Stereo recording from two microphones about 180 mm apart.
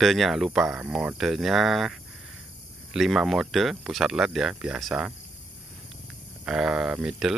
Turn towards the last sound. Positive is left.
turn(degrees=-5)  # may be behind; listen again after turning